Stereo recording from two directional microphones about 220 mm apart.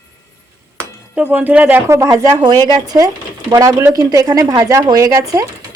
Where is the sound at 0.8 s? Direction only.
5° right (ahead or behind).